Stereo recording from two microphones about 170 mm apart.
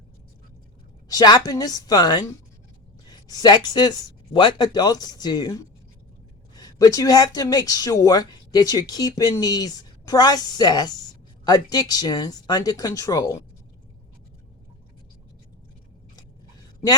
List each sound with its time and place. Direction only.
1.0 s speech: 20° left (ahead or behind)